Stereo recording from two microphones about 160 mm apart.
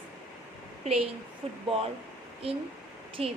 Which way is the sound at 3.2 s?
40° right (ahead or behind).